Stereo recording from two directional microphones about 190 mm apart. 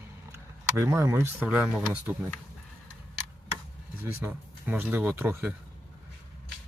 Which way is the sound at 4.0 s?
10° right (ahead or behind).